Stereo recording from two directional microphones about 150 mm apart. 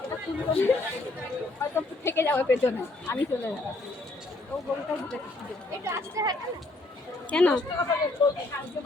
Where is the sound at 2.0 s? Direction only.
15° left (ahead or behind).